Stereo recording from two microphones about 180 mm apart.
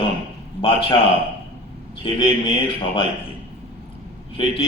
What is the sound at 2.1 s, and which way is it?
Speech, 25° left (ahead or behind).